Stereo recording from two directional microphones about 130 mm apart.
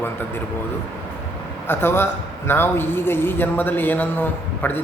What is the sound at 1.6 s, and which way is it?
A man's voice, 15° left (ahead or behind).